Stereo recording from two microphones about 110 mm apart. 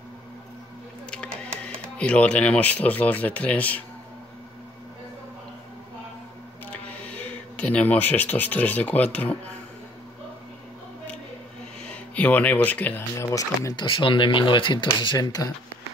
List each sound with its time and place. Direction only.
1.1 s speech: 10° left (ahead or behind)
6.7 s speech: 15° left (ahead or behind)
11.9 s speech: 15° left (ahead or behind)
13.3 s speech: 30° left (ahead or behind)
13.8 s speech: 50° left (ahead or behind)